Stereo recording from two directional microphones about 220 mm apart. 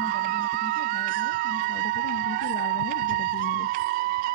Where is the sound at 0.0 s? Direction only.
40° right (ahead or behind).